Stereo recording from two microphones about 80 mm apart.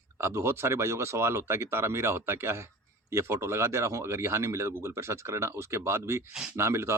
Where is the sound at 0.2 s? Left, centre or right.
Right.